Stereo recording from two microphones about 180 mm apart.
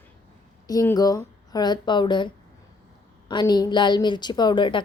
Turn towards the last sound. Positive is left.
turn(degrees=25)  # may be behind; listen again after turning